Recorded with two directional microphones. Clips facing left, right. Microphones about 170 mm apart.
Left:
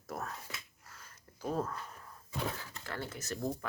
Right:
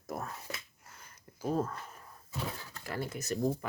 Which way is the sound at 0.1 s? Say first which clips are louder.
Right 2 dB; 10° right (ahead or behind).